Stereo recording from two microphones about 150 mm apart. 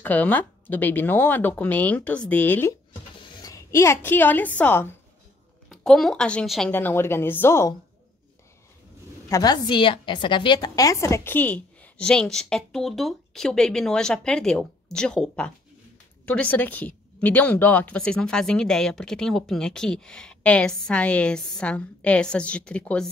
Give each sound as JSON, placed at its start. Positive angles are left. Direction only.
{"t": 0.0, "sound": "speech", "side_deg": 10}
{"t": 3.2, "sound": "a woman's voice", "side_deg": 20}
{"t": 5.7, "sound": "a woman's voice", "side_deg": 0}
{"t": 6.7, "sound": "speech", "side_deg": 15}
{"t": 9.3, "sound": "a woman's voice", "side_deg": 25}